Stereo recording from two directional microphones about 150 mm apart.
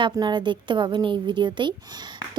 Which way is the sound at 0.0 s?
30° right (ahead or behind).